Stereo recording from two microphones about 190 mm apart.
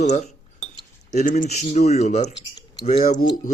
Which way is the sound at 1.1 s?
40° left (ahead or behind).